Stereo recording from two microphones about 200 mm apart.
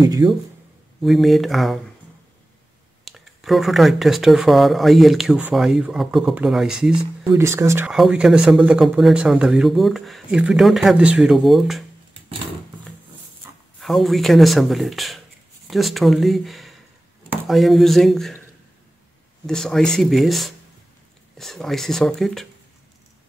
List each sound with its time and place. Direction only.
0.0 s speech: 20° right (ahead or behind)
1.0 s speech: centre (ahead or behind)
3.1 s speech: centre (ahead or behind)
7.2 s speech: 15° right (ahead or behind)
7.9 s speech: centre (ahead or behind)
13.7 s speech: centre (ahead or behind)
19.4 s speech: centre (ahead or behind)